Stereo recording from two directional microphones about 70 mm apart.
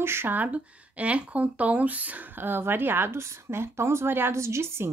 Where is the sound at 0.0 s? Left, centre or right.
Right.